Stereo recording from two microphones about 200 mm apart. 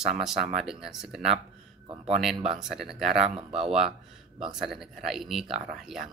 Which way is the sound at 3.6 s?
Centre (ahead or behind).